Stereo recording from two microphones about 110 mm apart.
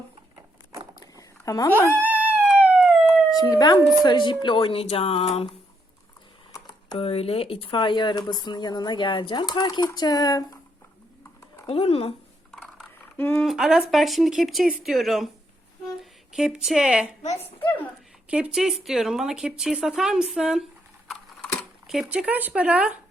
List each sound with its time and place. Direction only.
0.9 s a sound: 30° left (ahead or behind)
1.9 s howl: 15° right (ahead or behind)
3.5 s speech: 35° left (ahead or behind); by 5.5 s 60° left (ahead or behind)
7.0 s speech: 60° left (ahead or behind); by 10.6 s 35° left (ahead or behind)
11.7 s speech: 60° left (ahead or behind)
12.5 s a sound: 5° left (ahead or behind)
13.1 s speech: 15° left (ahead or behind)
13.4 s speech: 5° right (ahead or behind)
16.3 s speech: 5° right (ahead or behind)
18.3 s speech: 10° right (ahead or behind)
21.1 s typing: 10° left (ahead or behind)
21.8 s speech: 5° right (ahead or behind)